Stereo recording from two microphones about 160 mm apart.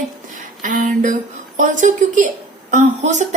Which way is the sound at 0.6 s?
55° right (ahead or behind).